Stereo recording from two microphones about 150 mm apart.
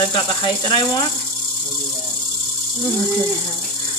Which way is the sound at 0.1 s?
30° left (ahead or behind).